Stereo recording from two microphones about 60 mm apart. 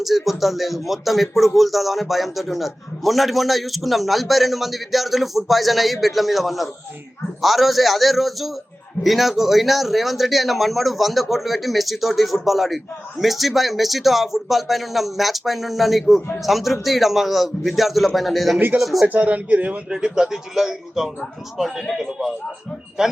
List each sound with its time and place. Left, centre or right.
0.0 s speech: centre
19.0 s a man's voice: right
19.9 s speech: centre